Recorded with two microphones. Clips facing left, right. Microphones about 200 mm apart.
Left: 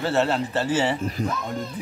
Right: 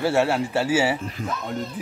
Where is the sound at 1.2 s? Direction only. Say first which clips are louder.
Left 3 dB; 65° left (ahead or behind).